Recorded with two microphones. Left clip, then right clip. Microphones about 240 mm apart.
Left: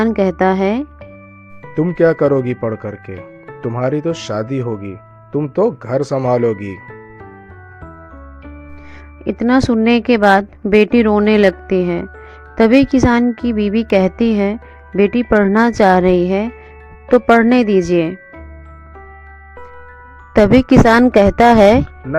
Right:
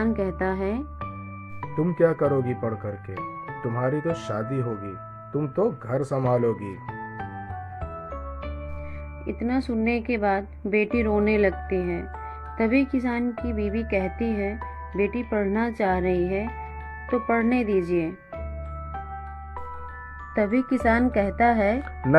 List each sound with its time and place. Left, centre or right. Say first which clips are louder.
0.0 s speech: left 12 dB; left
9.2 s speech: left 13 dB; left
20.3 s speech: left 14 dB; left